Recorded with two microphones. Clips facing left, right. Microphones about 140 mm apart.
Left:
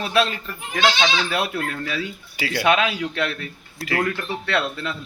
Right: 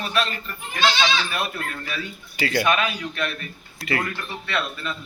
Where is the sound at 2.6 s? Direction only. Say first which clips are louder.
Left 3 dB; 85° left.